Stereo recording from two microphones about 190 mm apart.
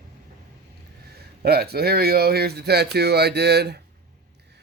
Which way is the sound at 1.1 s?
55° right (ahead or behind).